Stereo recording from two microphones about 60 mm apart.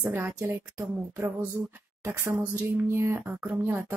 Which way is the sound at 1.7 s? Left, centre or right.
Right.